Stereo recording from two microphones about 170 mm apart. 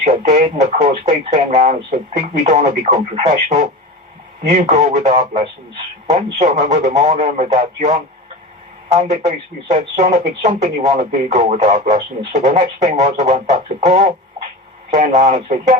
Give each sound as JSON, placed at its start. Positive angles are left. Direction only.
{"t": 0.0, "sound": "speech", "side_deg": -45}